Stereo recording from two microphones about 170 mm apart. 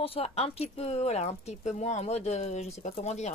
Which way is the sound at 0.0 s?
35° left (ahead or behind).